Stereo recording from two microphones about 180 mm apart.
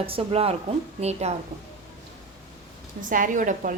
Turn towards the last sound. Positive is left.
turn(degrees=-45)  # may be behind; listen again after turning